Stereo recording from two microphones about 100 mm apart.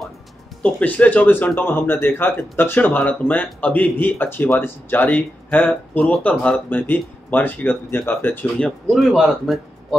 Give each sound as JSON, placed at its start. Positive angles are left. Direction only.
{"t": 0.6, "sound": "speech", "side_deg": 15}
{"t": 8.5, "sound": "speech", "side_deg": 10}